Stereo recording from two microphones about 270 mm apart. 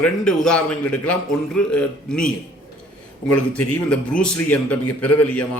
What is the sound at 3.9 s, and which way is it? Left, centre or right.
Speech, centre.